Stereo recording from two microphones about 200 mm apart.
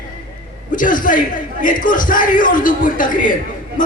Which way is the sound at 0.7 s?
40° left (ahead or behind).